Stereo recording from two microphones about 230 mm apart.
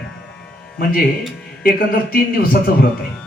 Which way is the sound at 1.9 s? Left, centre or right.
Left.